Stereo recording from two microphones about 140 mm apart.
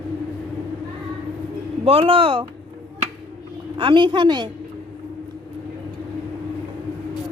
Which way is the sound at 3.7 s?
35° right (ahead or behind).